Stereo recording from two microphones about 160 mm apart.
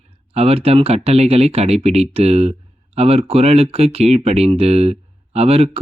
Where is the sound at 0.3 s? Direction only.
40° right (ahead or behind).